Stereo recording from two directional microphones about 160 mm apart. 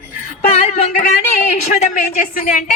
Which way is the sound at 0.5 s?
45° left (ahead or behind).